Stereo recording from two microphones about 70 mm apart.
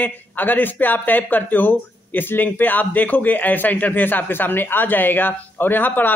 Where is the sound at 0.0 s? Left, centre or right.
Left.